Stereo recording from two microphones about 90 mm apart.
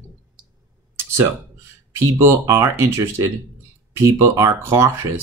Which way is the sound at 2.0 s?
30° right (ahead or behind).